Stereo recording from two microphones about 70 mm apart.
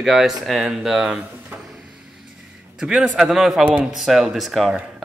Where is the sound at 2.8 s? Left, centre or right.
Centre.